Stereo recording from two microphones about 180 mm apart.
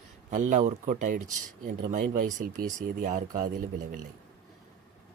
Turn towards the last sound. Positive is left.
turn(degrees=-50)  # may be behind; listen again after turning